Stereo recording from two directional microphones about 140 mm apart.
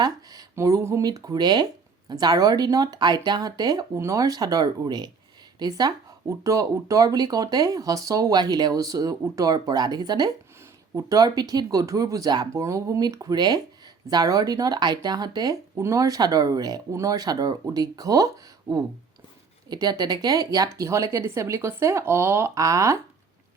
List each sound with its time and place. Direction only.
0.0 s speech: 25° right (ahead or behind)
19.7 s speech: 30° right (ahead or behind)